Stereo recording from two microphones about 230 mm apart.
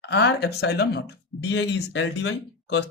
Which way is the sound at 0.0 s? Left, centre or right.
Left.